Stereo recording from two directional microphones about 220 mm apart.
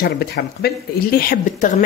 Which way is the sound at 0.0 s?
45° left (ahead or behind).